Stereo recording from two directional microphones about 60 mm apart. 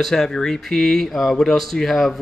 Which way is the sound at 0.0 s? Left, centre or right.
Centre.